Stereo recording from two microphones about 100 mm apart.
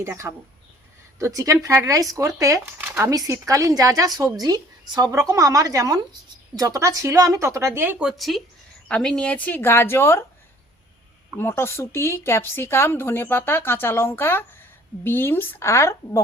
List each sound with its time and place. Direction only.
0.0 s speech: 30° right (ahead or behind)
2.8 s a sound: 20° right (ahead or behind)
3.1 s speech: 30° right (ahead or behind)
8.0 s speech: centre (ahead or behind); by 10.2 s 25° left (ahead or behind)
11.3 s speech: 25° left (ahead or behind)